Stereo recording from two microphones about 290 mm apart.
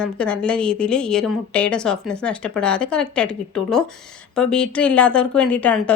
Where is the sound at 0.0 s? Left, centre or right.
Centre.